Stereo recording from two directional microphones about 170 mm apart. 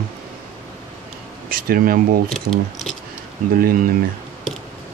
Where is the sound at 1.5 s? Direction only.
60° right (ahead or behind).